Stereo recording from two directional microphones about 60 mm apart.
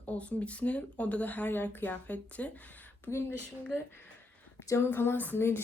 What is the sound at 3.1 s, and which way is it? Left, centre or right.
Speech, left.